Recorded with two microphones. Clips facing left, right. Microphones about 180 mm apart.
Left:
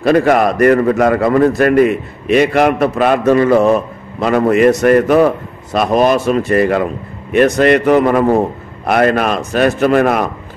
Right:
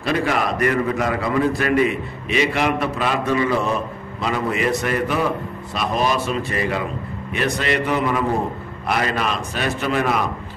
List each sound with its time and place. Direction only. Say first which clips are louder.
0.0 s a man's voice: left 10 dB; 50° left (ahead or behind)